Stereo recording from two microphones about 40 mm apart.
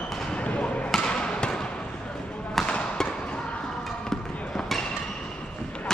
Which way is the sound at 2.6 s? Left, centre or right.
Left.